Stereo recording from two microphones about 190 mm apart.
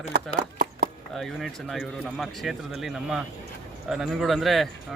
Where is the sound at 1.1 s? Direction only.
Centre (ahead or behind).